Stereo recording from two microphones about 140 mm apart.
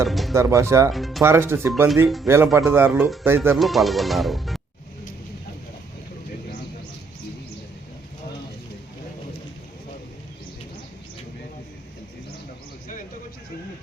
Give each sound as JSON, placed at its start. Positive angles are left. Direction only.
{"t": 0.0, "sound": "speech", "side_deg": 0}
{"t": 0.3, "sound": "speech", "side_deg": -20}
{"t": 0.9, "sound": "speech", "side_deg": 0}
{"t": 1.2, "sound": "speech", "side_deg": -15}
{"t": 3.6, "sound": "speech", "side_deg": 0}